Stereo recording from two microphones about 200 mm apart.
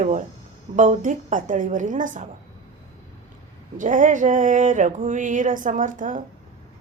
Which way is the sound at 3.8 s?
40° right (ahead or behind).